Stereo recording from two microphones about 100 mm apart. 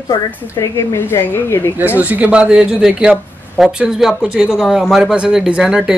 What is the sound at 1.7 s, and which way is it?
Speech, 15° right (ahead or behind).